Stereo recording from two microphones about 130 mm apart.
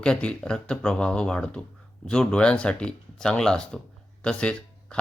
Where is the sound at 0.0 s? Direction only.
5° left (ahead or behind).